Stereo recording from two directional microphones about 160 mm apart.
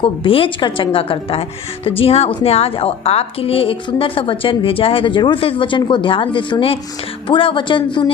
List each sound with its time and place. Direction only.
0.0 s a woman's voice: 35° left (ahead or behind)